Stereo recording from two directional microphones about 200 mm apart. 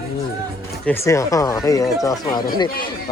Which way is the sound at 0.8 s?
10° left (ahead or behind).